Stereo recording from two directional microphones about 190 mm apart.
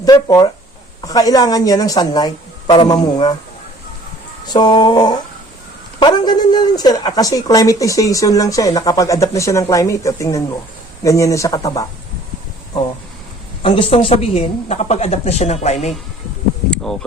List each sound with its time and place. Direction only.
0.0 s a woman's voice: 20° left (ahead or behind)
4.4 s a woman's voice: 20° left (ahead or behind)
13.6 s a woman's voice: 30° left (ahead or behind)
16.6 s insect: 5° left (ahead or behind)